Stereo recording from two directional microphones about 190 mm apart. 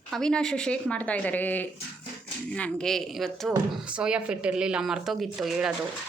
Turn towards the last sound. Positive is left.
turn(degrees=-5)  # may be behind; listen again after turning